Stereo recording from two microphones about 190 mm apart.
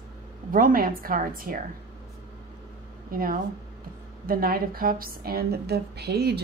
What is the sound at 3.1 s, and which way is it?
Speech, 50° right (ahead or behind).